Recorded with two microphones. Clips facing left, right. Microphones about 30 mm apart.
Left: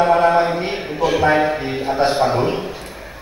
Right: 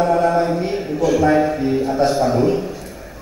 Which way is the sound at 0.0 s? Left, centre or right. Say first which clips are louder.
Left 2 dB; left.